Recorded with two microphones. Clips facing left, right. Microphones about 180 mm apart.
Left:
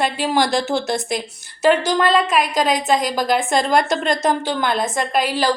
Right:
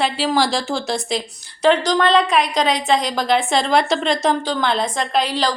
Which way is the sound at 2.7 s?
45° left (ahead or behind).